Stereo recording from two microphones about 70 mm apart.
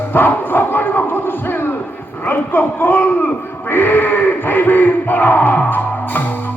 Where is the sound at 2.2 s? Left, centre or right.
Left.